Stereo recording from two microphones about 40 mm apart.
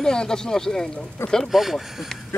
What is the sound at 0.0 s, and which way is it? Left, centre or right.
Speech, centre.